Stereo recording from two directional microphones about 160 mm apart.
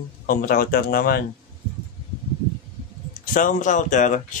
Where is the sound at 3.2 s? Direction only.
55° left (ahead or behind).